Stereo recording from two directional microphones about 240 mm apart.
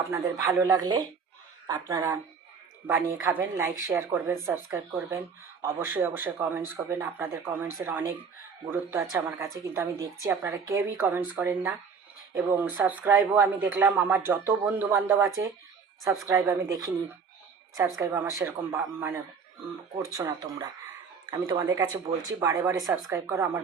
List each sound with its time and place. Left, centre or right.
0.1 s speech: centre
3.2 s speech: centre